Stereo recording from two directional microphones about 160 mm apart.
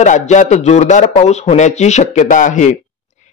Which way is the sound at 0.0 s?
50° left (ahead or behind).